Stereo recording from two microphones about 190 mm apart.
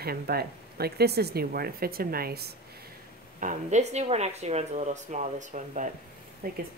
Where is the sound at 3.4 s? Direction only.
40° right (ahead or behind).